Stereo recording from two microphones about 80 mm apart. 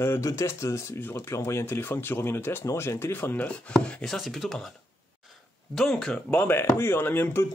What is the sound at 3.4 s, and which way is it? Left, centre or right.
Speech, centre.